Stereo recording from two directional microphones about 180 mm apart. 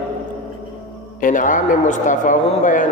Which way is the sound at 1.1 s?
45° left (ahead or behind).